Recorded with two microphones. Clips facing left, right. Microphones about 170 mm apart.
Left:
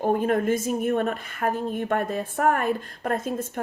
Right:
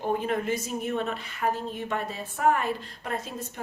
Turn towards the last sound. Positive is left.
turn(degrees=50)  # may be behind; listen again after turning